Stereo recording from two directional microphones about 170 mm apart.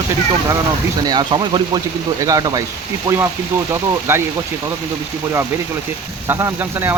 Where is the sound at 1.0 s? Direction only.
25° right (ahead or behind).